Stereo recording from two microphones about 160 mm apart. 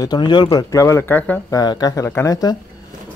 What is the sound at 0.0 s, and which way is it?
Speech, 25° left (ahead or behind).